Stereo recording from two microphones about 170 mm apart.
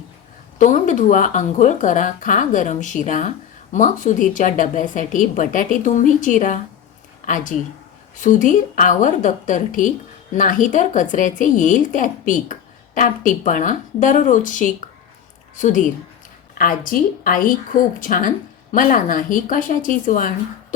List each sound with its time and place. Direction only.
0.6 s a woman's voice: 50° left (ahead or behind)